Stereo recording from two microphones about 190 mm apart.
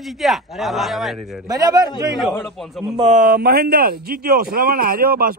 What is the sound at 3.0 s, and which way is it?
A man's voice, 40° right (ahead or behind).